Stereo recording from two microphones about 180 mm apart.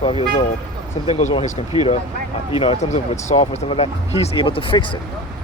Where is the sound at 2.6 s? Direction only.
30° left (ahead or behind).